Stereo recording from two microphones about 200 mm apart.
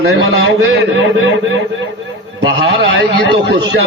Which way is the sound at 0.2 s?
65° right (ahead or behind).